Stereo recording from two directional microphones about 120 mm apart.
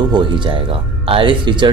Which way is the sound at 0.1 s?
45° right (ahead or behind).